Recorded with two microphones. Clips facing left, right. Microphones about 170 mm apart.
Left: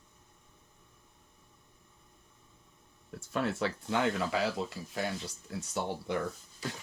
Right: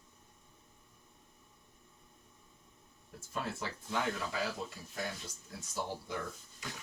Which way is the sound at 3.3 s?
75° left (ahead or behind).